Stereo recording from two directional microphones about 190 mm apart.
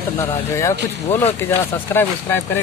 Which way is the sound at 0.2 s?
15° left (ahead or behind).